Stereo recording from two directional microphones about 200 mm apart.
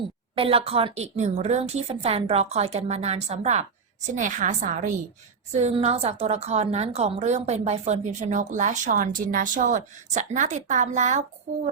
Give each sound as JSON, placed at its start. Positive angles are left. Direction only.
{"t": 0.3, "sound": "a woman's voice", "side_deg": -25}